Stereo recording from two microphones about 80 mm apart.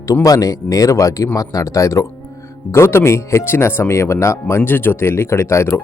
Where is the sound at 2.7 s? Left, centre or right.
Left.